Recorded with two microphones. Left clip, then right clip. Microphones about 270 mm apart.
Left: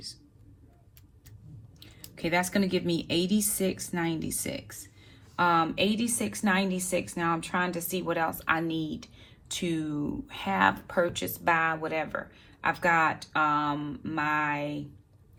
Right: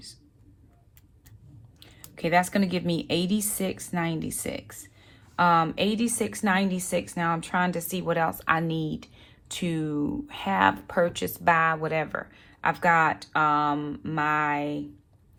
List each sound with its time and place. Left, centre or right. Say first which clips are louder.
1.8 s a woman's voice: right 3 dB; right